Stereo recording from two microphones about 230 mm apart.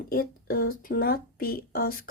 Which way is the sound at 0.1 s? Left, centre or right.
Left.